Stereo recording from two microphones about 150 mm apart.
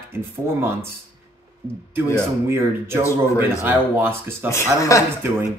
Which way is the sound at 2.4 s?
15° right (ahead or behind).